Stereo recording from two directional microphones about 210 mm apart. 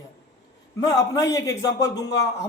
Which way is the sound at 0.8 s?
15° left (ahead or behind).